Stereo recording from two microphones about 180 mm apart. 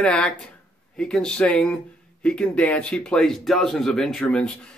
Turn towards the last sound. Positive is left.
turn(degrees=5)  # may be behind; listen again after turning